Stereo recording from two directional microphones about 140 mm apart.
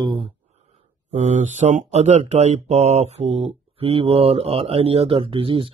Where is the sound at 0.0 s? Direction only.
35° right (ahead or behind).